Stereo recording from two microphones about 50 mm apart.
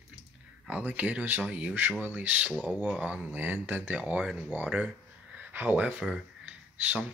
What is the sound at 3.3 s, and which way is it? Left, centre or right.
Speech, right.